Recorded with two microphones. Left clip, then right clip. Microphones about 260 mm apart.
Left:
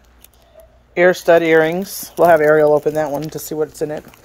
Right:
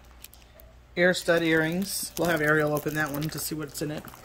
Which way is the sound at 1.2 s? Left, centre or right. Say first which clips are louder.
Left 12 dB; left.